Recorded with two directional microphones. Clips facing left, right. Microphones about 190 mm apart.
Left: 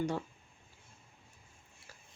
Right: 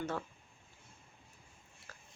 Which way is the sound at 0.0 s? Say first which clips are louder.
Left 4 dB; 15° left (ahead or behind).